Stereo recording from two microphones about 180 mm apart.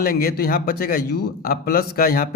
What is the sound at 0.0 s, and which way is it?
A man's voice, 60° left (ahead or behind).